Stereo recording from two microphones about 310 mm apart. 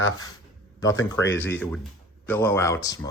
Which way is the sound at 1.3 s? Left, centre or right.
Centre.